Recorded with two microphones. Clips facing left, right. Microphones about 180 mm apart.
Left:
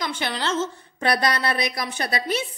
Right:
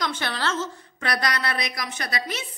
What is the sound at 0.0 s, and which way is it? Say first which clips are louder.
A woman's voice: left 1 dB; 15° left (ahead or behind).